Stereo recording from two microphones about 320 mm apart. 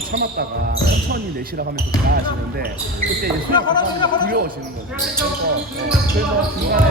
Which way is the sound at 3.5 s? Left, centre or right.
Centre.